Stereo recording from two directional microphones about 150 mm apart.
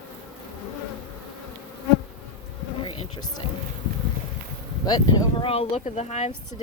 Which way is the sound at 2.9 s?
30° left (ahead or behind).